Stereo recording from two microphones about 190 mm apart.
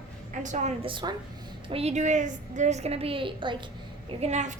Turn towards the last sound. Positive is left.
turn(degrees=-40)  # may be behind; listen again after turning